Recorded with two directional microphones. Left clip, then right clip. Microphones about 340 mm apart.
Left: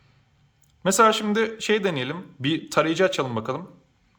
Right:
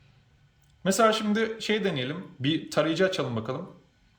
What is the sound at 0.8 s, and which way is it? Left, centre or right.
Speech, centre.